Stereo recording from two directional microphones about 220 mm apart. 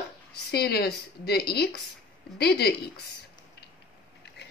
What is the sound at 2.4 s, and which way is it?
Speech, 45° left (ahead or behind).